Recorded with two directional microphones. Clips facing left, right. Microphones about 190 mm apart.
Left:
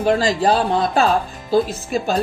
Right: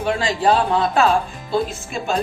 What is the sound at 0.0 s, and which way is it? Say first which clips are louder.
Speech: left 3 dB; 40° left (ahead or behind).